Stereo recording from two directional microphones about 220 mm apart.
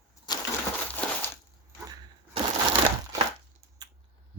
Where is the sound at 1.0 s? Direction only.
5° left (ahead or behind).